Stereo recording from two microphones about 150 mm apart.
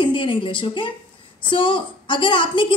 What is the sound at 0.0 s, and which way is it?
A woman's voice, 35° left (ahead or behind).